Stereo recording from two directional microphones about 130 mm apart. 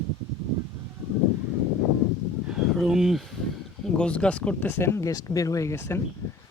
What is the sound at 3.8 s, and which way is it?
Speech, 10° left (ahead or behind).